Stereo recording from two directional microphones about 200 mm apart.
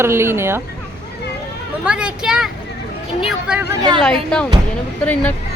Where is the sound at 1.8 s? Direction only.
5° right (ahead or behind).